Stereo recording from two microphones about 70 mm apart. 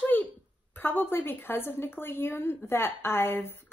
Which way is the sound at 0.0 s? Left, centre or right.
Left.